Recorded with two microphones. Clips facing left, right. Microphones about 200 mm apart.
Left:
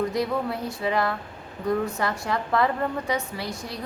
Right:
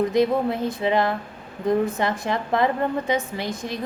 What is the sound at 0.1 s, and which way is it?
A woman's voice, 20° right (ahead or behind).